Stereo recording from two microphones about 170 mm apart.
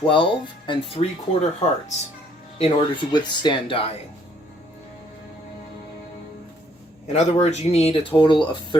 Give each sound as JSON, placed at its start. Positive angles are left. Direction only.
{"t": 0.0, "sound": "speech", "side_deg": 30}
{"t": 2.6, "sound": "speech", "side_deg": 30}
{"t": 7.1, "sound": "speech", "side_deg": 40}